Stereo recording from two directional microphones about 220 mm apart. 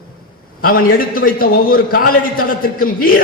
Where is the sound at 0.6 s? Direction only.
40° left (ahead or behind).